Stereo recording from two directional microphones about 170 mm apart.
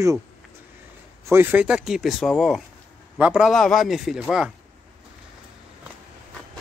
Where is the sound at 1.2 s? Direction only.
15° right (ahead or behind).